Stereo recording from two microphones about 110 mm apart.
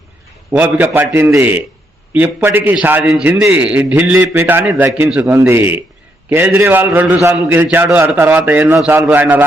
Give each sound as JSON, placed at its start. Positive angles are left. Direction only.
{"t": 0.5, "sound": "a man's voice", "side_deg": -15}